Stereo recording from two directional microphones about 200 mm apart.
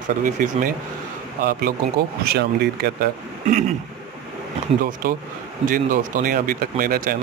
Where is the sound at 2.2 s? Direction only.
50° right (ahead or behind).